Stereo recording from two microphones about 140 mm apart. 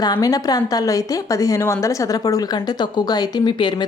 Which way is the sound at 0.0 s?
25° left (ahead or behind).